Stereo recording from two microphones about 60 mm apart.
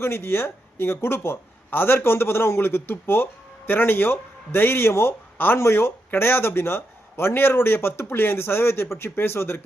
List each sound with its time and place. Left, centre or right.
0.0 s a man's voice: left